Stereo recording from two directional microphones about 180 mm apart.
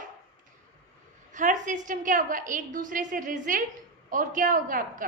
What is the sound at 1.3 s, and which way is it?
A woman's voice, 45° right (ahead or behind).